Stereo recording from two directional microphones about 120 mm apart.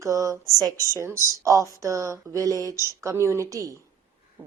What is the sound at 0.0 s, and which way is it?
Speech, 25° right (ahead or behind).